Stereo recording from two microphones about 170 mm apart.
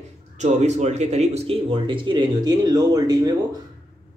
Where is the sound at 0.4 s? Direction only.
40° right (ahead or behind).